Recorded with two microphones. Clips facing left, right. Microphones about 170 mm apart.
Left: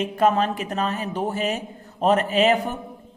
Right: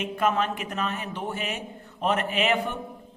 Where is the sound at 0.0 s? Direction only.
35° left (ahead or behind).